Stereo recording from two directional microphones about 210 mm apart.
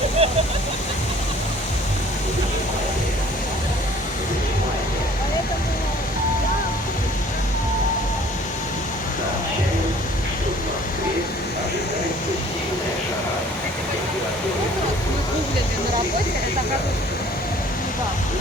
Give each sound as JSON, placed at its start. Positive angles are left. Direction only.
{"t": 0.2, "sound": "speech", "side_deg": -25}